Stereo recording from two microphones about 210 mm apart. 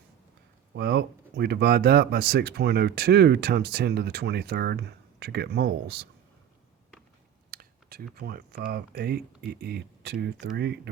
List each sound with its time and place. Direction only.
0.7 s speech: 50° right (ahead or behind)
7.5 s speech: 45° right (ahead or behind)